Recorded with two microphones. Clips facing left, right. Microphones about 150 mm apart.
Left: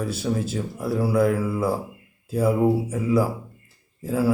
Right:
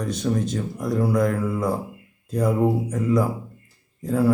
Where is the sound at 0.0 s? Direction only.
5° left (ahead or behind).